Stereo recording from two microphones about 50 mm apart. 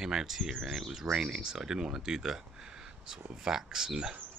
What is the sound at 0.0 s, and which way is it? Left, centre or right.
Speech, centre.